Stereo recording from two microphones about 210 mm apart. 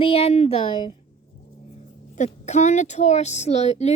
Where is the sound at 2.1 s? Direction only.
35° left (ahead or behind).